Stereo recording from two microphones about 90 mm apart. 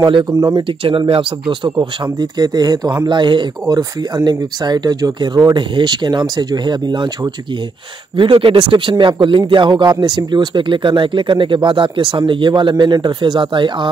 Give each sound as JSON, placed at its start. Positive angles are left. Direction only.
{"t": 0.0, "sound": "speech", "side_deg": -55}
{"t": 0.3, "sound": "speech", "side_deg": -40}
{"t": 0.7, "sound": "speech", "side_deg": -80}
{"t": 3.1, "sound": "speech", "side_deg": -60}
{"t": 3.6, "sound": "speech", "side_deg": -45}
{"t": 8.2, "sound": "speech", "side_deg": -70}